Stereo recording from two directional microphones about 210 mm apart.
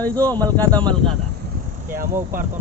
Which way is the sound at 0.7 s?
5° left (ahead or behind).